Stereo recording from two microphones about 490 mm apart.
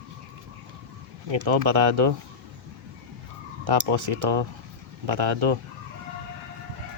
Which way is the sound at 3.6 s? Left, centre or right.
Right.